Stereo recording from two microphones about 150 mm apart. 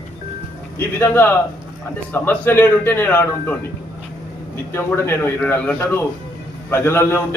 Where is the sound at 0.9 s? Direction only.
15° left (ahead or behind).